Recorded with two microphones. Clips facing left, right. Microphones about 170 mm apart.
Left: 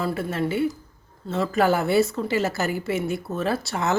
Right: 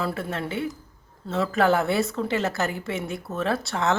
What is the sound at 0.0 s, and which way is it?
Speech, centre (ahead or behind).